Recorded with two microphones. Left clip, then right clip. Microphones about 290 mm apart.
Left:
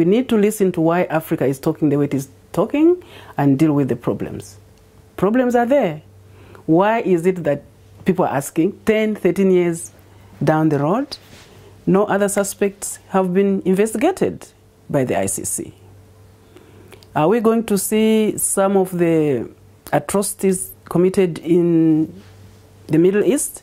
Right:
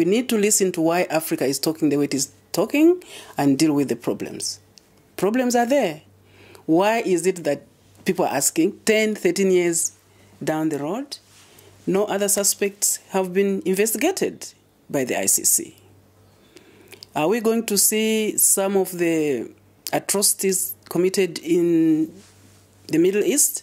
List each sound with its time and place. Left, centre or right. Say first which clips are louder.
0.0 s speech: left 4 dB; left
16.9 s speech: left 5 dB; left